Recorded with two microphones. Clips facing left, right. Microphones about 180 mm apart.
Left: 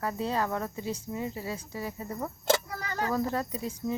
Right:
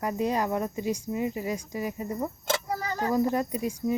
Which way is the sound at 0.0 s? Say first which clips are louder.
Right 3 dB; 15° right (ahead or behind).